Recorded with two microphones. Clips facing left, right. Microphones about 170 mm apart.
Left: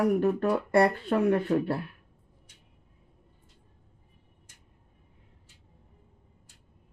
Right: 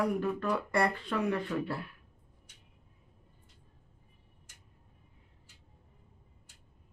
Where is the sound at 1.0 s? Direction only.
50° left (ahead or behind).